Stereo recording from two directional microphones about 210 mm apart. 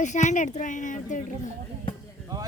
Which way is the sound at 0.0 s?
35° left (ahead or behind).